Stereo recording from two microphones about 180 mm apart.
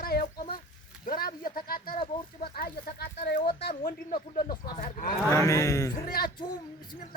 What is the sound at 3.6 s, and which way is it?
Speech, 55° left (ahead or behind).